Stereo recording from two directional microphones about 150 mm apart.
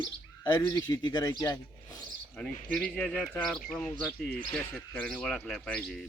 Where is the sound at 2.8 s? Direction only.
5° left (ahead or behind).